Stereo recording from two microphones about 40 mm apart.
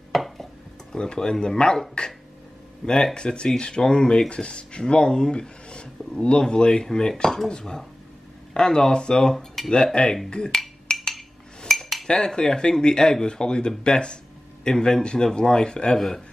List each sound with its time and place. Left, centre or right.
0.1 s dishes: centre
0.9 s speech: centre
4.3 s speech: left
9.3 s speech: centre
10.0 s speech: left
10.5 s chink: centre
12.1 s speech: centre